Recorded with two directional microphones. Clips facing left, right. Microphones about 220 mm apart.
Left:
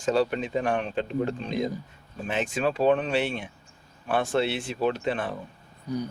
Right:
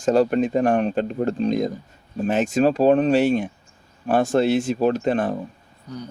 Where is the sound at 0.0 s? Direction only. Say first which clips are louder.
Right 7 dB; 45° right (ahead or behind).